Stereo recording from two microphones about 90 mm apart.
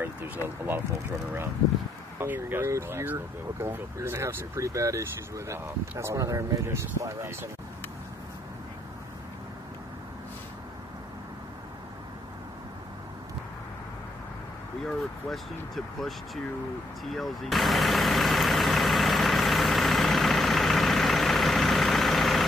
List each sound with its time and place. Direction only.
2.1 s speech: 25° right (ahead or behind)
14.9 s speech: centre (ahead or behind)
17.0 s vehicle: centre (ahead or behind)